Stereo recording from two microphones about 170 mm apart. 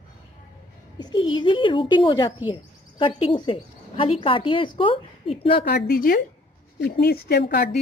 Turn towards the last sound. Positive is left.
turn(degrees=75)  # may be behind; listen again after turning